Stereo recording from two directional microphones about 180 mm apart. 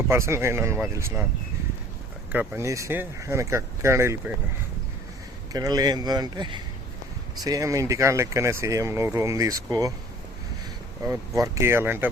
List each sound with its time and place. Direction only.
0.1 s speech: 15° right (ahead or behind)
2.3 s speech: 10° right (ahead or behind)
5.5 s speech: 20° right (ahead or behind)
11.0 s speech: 15° right (ahead or behind)